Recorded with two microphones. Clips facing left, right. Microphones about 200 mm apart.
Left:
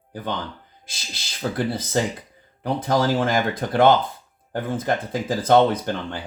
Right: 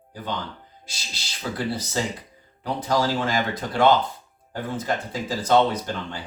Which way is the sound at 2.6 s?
55° left (ahead or behind).